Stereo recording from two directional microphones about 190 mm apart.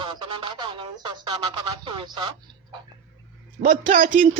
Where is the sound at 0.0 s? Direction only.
25° right (ahead or behind).